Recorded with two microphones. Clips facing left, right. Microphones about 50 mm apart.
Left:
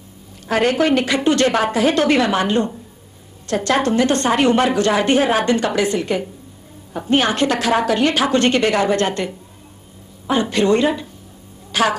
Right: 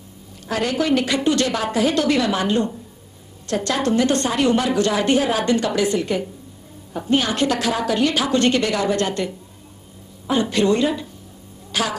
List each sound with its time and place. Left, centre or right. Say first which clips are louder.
0.5 s a woman's voice: left 4 dB; left